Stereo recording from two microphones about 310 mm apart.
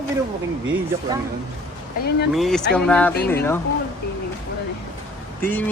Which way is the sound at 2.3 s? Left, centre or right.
Centre.